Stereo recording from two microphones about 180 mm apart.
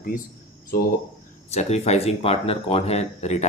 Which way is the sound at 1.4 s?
35° left (ahead or behind).